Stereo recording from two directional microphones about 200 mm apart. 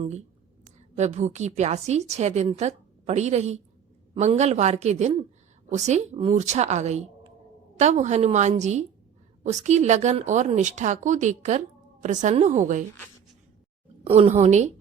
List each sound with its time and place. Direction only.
0.9 s a woman's voice: 35° right (ahead or behind)
14.0 s a woman's voice: 30° right (ahead or behind)